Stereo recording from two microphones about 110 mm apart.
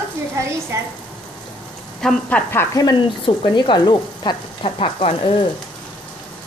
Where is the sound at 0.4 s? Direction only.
25° right (ahead or behind).